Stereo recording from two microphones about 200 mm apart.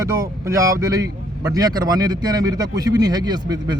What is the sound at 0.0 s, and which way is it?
Speech, 15° right (ahead or behind).